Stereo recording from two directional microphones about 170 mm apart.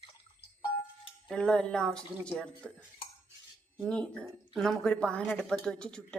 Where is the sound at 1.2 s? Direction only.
5° left (ahead or behind).